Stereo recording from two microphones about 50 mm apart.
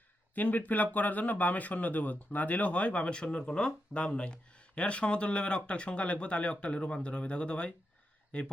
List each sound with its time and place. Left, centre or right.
0.3 s speech: left